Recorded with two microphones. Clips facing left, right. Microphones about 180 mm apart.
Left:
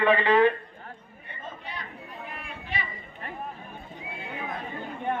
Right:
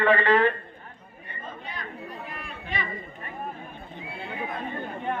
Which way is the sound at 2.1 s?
40° right (ahead or behind).